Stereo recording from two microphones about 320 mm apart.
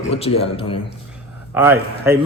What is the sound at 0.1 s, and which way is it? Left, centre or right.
Speech, centre.